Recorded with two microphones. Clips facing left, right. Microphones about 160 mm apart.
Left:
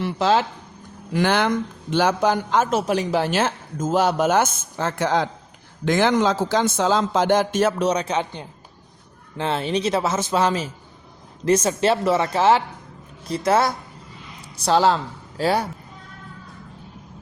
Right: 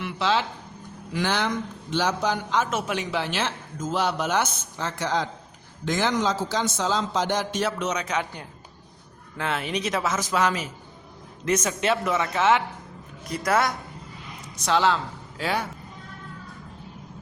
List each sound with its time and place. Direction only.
0.0 s speech: 45° left (ahead or behind)
1.1 s speech: 55° left (ahead or behind)
2.6 s a man's voice: 35° left (ahead or behind)
7.9 s speech: 30° left (ahead or behind)